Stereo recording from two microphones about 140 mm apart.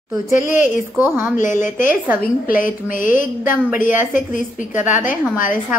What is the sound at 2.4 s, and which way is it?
A woman's voice, 75° left (ahead or behind).